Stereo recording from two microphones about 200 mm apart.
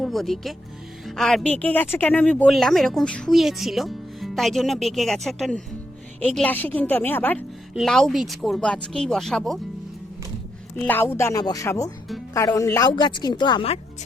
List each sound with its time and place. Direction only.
0.0 s a woman's voice: centre (ahead or behind)
10.8 s a woman's voice: 10° left (ahead or behind)